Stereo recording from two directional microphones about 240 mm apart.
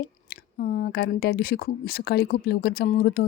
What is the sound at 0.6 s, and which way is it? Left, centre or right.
Speech, left.